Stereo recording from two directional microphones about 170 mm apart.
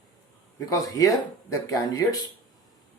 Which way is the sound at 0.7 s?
20° left (ahead or behind).